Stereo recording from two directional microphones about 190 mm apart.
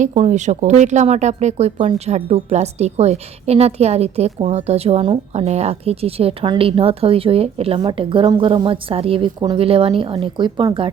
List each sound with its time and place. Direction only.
0.0 s speech: 35° right (ahead or behind)